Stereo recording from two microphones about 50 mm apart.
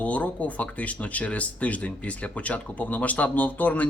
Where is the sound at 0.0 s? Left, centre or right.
Left.